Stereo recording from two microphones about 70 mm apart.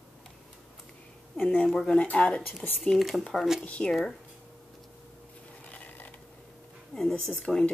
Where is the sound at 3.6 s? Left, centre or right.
Left.